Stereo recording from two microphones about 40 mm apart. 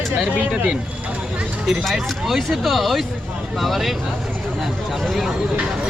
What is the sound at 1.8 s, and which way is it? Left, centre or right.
Speech, centre.